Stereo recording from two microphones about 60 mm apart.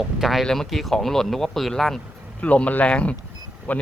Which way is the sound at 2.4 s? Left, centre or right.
Left.